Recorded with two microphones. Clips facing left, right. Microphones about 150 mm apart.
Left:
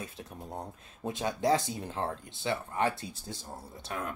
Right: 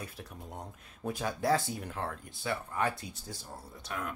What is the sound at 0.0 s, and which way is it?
Speech, 25° left (ahead or behind).